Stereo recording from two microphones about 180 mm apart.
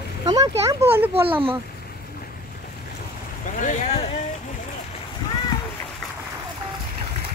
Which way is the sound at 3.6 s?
45° left (ahead or behind).